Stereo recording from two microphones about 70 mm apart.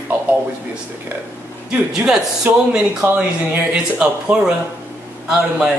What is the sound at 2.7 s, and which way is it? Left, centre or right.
Speech, centre.